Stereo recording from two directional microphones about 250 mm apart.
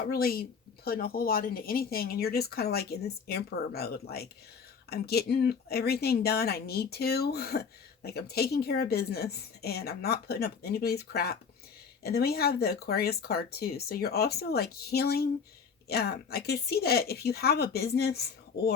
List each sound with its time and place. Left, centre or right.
0.1 s speech: left